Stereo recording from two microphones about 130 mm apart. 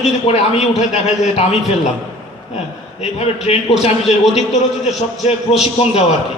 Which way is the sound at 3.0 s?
55° left (ahead or behind).